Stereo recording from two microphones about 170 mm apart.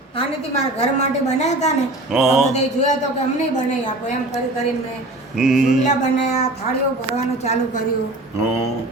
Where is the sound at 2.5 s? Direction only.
45° left (ahead or behind).